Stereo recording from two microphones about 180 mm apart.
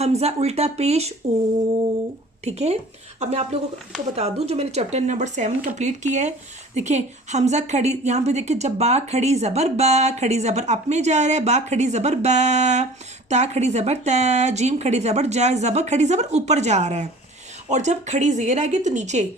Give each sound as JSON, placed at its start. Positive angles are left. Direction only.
{"t": 0.0, "sound": "a woman's voice", "side_deg": -35}
{"t": 2.4, "sound": "a woman's voice", "side_deg": -35}